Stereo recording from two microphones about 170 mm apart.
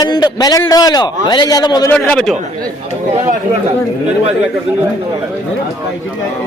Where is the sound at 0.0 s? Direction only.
25° left (ahead or behind).